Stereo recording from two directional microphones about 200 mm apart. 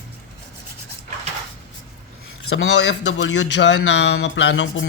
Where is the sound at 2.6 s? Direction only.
65° left (ahead or behind).